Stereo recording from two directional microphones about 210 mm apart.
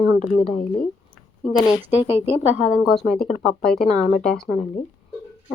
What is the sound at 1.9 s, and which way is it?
Speech, 10° right (ahead or behind).